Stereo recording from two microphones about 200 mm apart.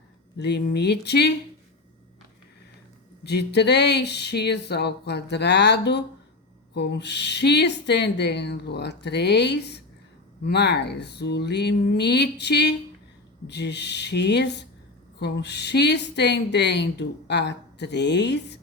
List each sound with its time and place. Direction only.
0.3 s a woman's voice: 55° left (ahead or behind)
3.2 s a woman's voice: 55° left (ahead or behind)